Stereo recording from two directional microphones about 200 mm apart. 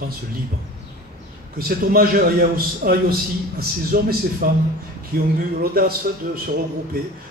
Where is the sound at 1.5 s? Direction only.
50° right (ahead or behind).